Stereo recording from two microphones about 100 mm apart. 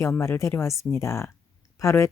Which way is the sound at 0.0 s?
30° left (ahead or behind).